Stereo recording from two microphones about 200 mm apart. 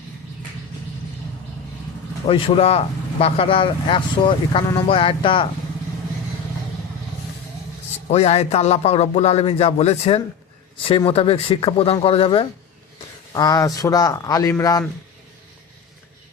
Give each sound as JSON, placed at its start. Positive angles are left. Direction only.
{"t": 2.2, "sound": "speech", "side_deg": 30}
{"t": 8.1, "sound": "a man's voice", "side_deg": 30}